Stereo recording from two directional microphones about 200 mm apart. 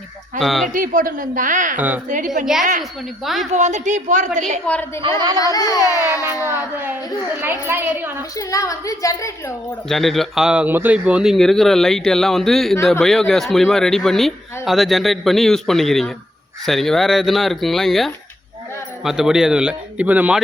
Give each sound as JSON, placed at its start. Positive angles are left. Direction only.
{"t": 0.3, "sound": "speech", "side_deg": 0}
{"t": 0.7, "sound": "speech", "side_deg": -45}
{"t": 3.5, "sound": "speech", "side_deg": -35}
{"t": 4.6, "sound": "a woman's voice", "side_deg": 5}
{"t": 5.4, "sound": "a woman's voice", "side_deg": 20}
{"t": 6.4, "sound": "a woman's voice", "side_deg": -10}
{"t": 8.4, "sound": "a woman's voice", "side_deg": 15}
{"t": 9.9, "sound": "speech", "side_deg": 0}